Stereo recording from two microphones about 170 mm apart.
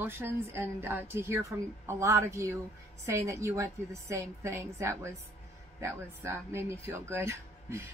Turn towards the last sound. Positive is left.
turn(degrees=-15)  # may be behind; listen again after turning